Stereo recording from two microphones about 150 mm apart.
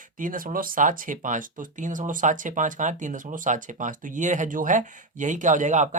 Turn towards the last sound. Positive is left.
turn(degrees=-55)  # may be behind; listen again after turning